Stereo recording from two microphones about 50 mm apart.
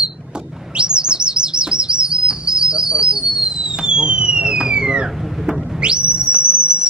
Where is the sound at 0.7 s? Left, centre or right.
Centre.